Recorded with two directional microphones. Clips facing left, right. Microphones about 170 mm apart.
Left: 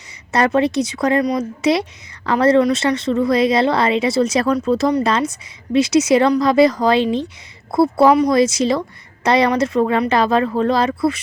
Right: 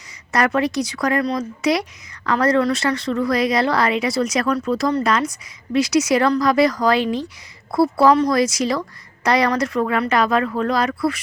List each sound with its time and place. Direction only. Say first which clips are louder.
0.3 s speech: left 3 dB; 25° left (ahead or behind)